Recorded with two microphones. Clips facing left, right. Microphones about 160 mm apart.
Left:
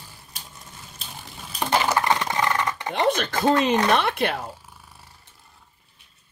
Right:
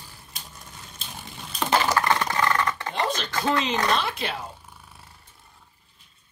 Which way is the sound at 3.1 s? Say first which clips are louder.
Left 4 dB; 55° left (ahead or behind).